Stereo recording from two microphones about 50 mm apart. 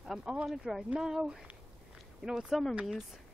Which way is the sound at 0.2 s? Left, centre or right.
Centre.